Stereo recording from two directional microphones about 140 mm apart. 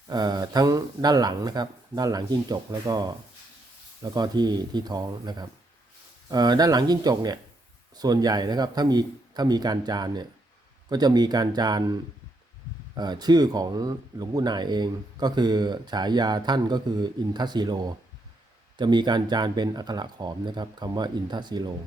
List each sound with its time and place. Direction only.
0.1 s speech: 30° right (ahead or behind)
13.0 s speech: 30° right (ahead or behind)